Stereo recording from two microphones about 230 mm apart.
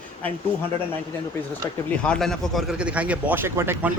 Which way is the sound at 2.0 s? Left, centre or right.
Centre.